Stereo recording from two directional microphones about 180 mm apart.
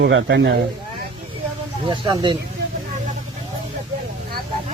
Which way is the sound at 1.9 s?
25° right (ahead or behind).